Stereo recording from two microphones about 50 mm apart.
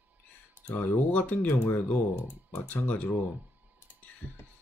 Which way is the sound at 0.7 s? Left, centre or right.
Left.